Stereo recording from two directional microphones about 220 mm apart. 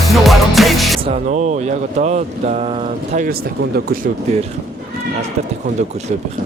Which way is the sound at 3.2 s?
45° right (ahead or behind).